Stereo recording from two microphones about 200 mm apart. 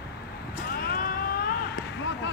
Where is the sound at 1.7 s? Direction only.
65° left (ahead or behind).